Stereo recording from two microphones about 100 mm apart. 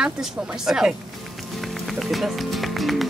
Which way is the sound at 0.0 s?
5° right (ahead or behind).